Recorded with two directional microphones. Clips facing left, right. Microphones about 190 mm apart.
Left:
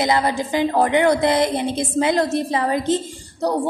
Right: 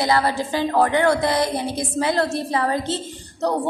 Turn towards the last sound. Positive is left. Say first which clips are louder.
# left 1 dB
turn(degrees=15)  # may be behind; listen again after turning